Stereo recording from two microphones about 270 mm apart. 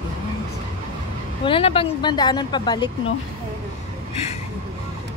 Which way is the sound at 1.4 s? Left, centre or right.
Centre.